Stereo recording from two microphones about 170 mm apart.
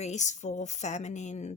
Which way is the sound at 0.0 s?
45° left (ahead or behind).